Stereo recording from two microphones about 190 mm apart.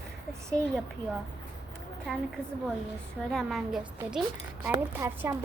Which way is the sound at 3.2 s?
Centre (ahead or behind).